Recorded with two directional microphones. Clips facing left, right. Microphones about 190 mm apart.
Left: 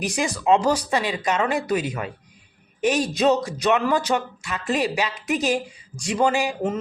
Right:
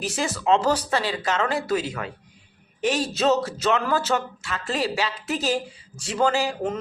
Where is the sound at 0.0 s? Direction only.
15° left (ahead or behind).